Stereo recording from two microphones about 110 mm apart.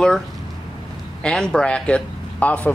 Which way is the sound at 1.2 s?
10° left (ahead or behind).